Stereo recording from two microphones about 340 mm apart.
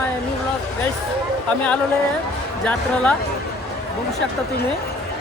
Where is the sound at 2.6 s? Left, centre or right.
Centre.